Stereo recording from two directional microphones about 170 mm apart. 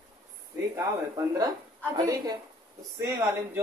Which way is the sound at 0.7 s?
20° right (ahead or behind).